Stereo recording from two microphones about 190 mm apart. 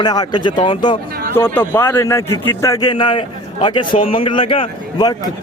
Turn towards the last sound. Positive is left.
turn(degrees=20)  # may be behind; listen again after turning